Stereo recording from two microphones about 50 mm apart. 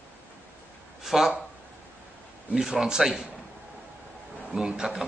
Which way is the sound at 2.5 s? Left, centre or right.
Centre.